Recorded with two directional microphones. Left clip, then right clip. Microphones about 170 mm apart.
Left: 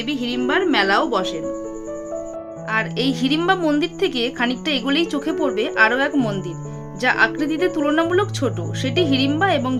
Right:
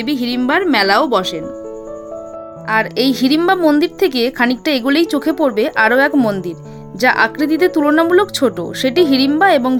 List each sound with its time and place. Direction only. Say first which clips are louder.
0.0 s a woman's voice: right 5 dB; 50° right (ahead or behind)
2.6 s a woman's voice: right 7 dB; 45° right (ahead or behind)